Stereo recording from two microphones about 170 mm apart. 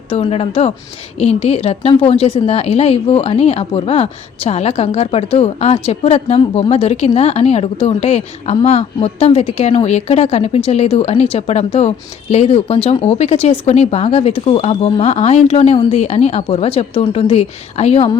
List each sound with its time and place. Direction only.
0.1 s a woman's voice: 35° left (ahead or behind)